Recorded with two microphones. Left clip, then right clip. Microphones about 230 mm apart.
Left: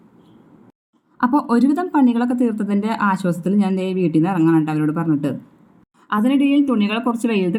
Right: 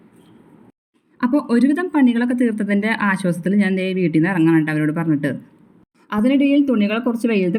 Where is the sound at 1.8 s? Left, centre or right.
Right.